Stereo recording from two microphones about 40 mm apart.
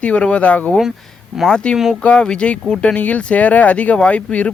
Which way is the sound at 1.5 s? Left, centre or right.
Left.